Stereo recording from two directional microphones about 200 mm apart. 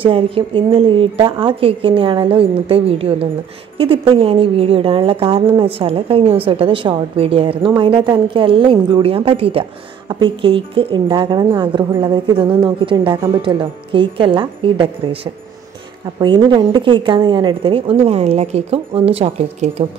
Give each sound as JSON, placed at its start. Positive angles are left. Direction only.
{"t": 0.0, "sound": "a woman's voice", "side_deg": -25}
{"t": 16.2, "sound": "a woman's voice", "side_deg": -20}